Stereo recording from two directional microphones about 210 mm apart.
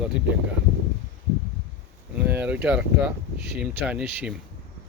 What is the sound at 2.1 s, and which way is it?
Speech, 10° right (ahead or behind).